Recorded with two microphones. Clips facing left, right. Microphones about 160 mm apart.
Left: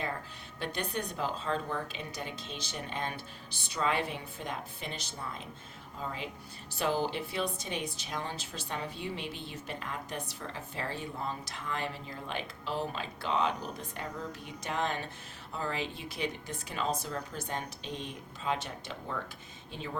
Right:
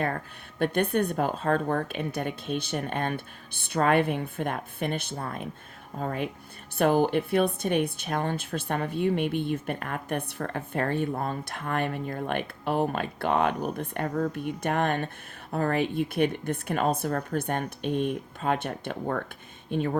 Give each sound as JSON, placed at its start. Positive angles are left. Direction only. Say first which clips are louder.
{"t": 0.6, "sound": "speech", "louder": "right 11 dB", "side_deg": -55}